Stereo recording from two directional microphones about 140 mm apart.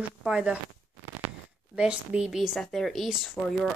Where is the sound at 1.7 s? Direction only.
5° right (ahead or behind).